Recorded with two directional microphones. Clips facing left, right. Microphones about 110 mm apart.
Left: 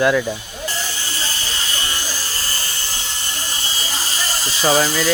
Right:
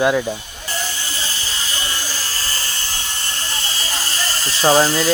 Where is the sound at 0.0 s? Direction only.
25° right (ahead or behind).